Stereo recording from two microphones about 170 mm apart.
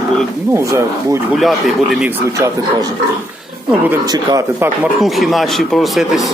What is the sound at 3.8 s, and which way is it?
Speech, 20° right (ahead or behind).